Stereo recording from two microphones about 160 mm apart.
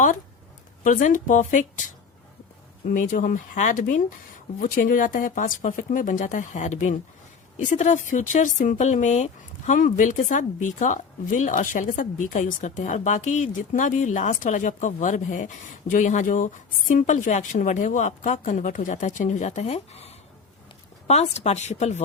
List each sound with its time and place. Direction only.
0.9 s speech: 55° left (ahead or behind)
2.9 s speech: 60° left (ahead or behind)